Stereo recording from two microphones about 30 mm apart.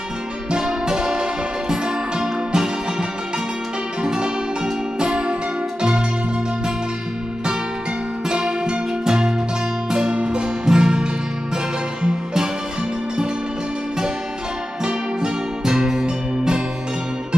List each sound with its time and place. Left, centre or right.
0.6 s music: centre
0.9 s music: right
4.0 s music: right
8.3 s music: right
14.8 s music: right